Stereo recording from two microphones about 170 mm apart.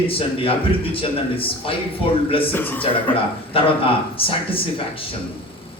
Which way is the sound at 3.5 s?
30° left (ahead or behind).